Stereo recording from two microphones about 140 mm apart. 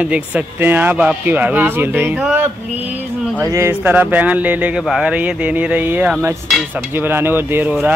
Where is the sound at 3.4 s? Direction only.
20° right (ahead or behind).